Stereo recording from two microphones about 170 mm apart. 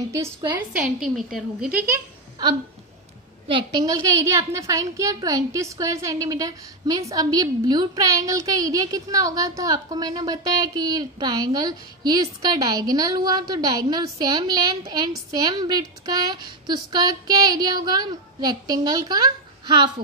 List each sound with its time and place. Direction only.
0.1 s a woman's voice: 15° right (ahead or behind)
0.9 s a woman's voice: 5° right (ahead or behind)
3.4 s a woman's voice: 25° right (ahead or behind)